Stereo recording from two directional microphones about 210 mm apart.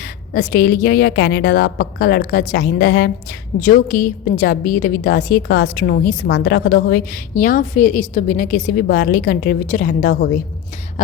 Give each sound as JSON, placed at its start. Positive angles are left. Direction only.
{"t": 0.3, "sound": "a woman's voice", "side_deg": 45}